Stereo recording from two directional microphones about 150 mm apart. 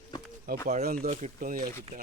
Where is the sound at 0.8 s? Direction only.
90° right.